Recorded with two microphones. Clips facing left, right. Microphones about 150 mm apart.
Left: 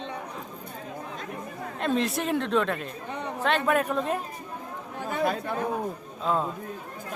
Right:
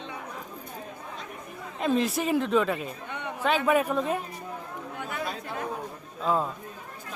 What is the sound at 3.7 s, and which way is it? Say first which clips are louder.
Speech: right 1 dB; centre (ahead or behind).